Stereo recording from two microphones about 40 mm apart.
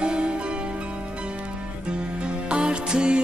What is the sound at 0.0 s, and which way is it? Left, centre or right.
Music, right.